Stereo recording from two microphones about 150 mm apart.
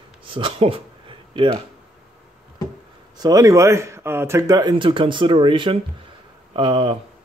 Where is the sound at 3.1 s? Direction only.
25° right (ahead or behind).